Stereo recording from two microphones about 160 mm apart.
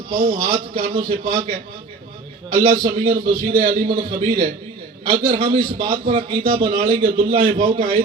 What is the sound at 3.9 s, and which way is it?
A man's voice, 35° right (ahead or behind).